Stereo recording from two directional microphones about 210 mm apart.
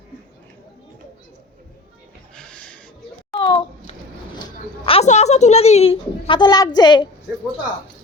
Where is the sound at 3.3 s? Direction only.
20° left (ahead or behind).